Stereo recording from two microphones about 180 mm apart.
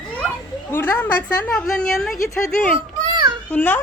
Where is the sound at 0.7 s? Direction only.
10° left (ahead or behind).